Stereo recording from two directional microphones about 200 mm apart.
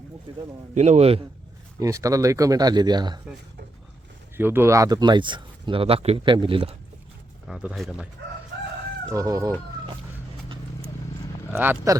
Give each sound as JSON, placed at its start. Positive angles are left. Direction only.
{"t": 0.7, "sound": "a man's voice", "side_deg": -35}
{"t": 1.8, "sound": "speech", "side_deg": -15}
{"t": 4.4, "sound": "speech", "side_deg": -10}
{"t": 7.4, "sound": "speech", "side_deg": -5}
{"t": 9.1, "sound": "speech", "side_deg": -15}
{"t": 11.5, "sound": "speech", "side_deg": -10}